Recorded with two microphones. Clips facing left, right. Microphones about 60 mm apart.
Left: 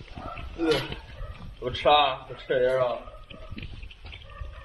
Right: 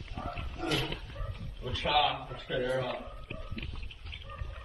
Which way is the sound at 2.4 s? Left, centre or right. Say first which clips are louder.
Left 10 dB; left.